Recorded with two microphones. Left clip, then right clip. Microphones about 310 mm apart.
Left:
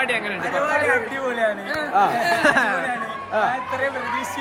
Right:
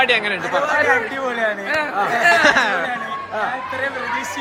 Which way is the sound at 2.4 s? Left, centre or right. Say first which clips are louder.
Right 3 dB; centre.